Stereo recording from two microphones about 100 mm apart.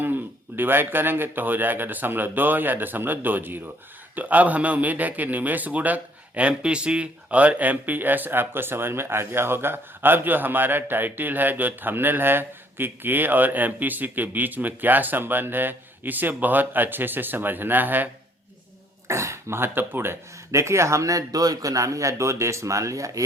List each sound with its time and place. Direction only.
0.0 s a man's voice: 20° right (ahead or behind)
19.0 s a man's voice: 30° right (ahead or behind)